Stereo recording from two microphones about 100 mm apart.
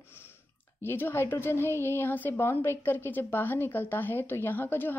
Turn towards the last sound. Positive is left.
turn(degrees=20)  # may be behind; listen again after turning